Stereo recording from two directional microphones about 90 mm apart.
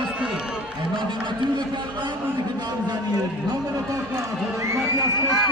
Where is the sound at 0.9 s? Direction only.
60° right (ahead or behind).